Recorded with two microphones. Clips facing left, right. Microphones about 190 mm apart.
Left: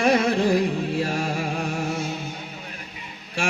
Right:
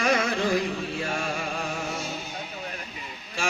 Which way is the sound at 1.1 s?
35° left (ahead or behind).